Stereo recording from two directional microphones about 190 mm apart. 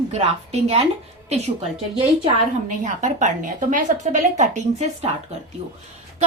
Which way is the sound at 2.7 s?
40° right (ahead or behind).